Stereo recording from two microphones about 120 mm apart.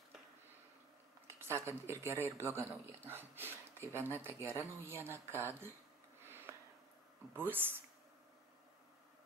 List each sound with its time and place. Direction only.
1.4 s speech: 20° right (ahead or behind)
6.2 s sniff: 20° right (ahead or behind)
7.3 s speech: 15° right (ahead or behind)